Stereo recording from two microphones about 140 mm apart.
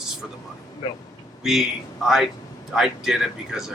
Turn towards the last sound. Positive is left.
turn(degrees=-5)  # may be behind; listen again after turning